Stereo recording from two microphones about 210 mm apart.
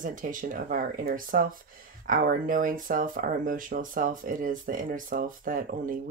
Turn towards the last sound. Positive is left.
turn(degrees=-40)  # may be behind; listen again after turning